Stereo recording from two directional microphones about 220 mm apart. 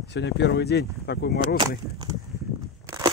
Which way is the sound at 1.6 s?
15° right (ahead or behind).